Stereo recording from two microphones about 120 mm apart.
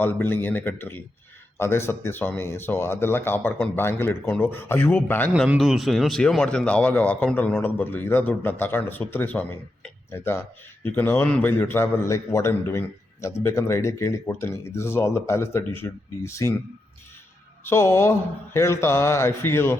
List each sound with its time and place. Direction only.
0.0 s speech: 15° left (ahead or behind)
5.5 s speech: centre (ahead or behind); by 16.5 s 25° left (ahead or behind)
17.7 s speech: 20° left (ahead or behind)